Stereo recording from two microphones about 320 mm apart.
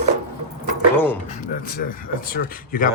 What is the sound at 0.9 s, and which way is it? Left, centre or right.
Speech, centre.